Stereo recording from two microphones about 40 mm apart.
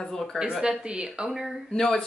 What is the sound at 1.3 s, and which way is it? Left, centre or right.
Speech, centre.